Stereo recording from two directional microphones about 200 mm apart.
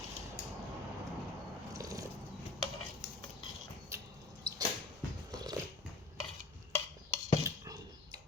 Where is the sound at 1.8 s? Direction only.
15° right (ahead or behind).